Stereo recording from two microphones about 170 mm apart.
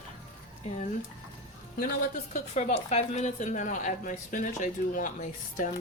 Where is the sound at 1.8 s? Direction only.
50° left (ahead or behind).